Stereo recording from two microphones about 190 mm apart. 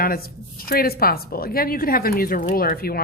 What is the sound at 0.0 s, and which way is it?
A woman's voice, 50° left (ahead or behind).